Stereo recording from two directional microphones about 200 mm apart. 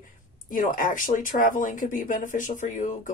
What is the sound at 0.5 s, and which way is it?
Speech, 40° left (ahead or behind).